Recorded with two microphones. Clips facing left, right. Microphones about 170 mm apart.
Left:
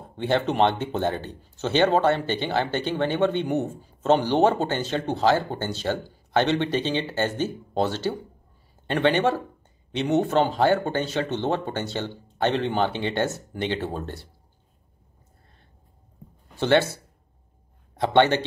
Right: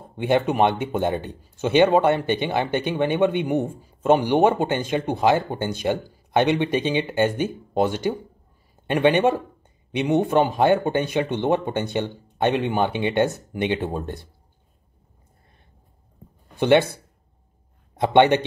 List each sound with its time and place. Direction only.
0.1 s speech: 15° right (ahead or behind)
16.5 s speech: 15° right (ahead or behind)
17.9 s speech: 15° right (ahead or behind)